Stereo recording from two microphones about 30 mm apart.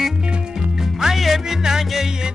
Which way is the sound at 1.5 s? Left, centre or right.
Centre.